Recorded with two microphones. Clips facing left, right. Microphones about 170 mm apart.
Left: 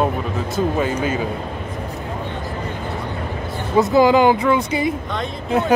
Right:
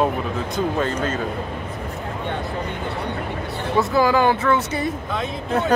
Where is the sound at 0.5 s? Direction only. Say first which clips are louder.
Left 3 dB; 5° left (ahead or behind).